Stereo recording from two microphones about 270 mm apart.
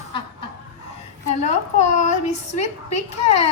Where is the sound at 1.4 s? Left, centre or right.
Left.